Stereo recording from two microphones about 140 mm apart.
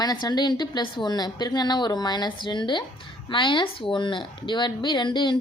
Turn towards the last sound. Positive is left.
turn(degrees=35)  # may be behind; listen again after turning